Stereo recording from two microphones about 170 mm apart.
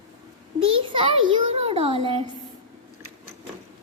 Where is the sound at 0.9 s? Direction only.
30° right (ahead or behind).